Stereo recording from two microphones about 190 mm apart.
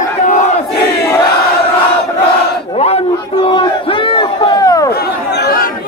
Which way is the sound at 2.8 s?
35° left (ahead or behind).